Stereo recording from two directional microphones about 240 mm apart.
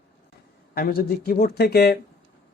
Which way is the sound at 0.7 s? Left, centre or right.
Left.